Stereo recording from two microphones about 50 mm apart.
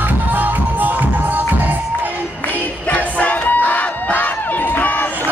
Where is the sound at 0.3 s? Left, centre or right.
Right.